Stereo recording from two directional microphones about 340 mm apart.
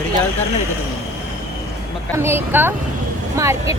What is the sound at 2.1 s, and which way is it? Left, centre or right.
Speech, centre.